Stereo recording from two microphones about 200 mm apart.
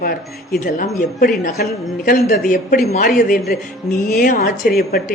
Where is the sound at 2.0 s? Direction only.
45° left (ahead or behind).